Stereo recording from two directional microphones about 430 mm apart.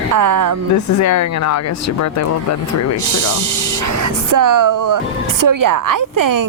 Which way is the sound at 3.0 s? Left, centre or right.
Right.